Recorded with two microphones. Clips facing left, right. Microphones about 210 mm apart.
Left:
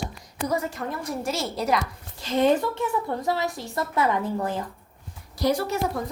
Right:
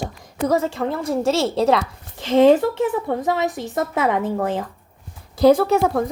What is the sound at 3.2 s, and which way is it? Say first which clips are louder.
Speech: right 5 dB; 20° right (ahead or behind).